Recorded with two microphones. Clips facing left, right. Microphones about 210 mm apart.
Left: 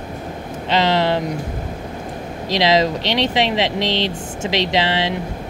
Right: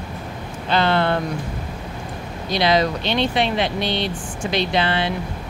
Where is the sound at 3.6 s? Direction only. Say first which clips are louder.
Left 2 dB; 90° left.